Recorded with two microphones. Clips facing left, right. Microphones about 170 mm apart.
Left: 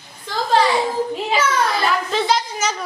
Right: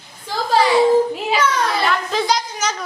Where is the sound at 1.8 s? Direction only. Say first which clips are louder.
Even; centre (ahead or behind).